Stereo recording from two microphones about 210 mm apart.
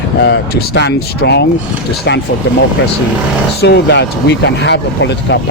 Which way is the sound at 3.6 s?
50° left (ahead or behind).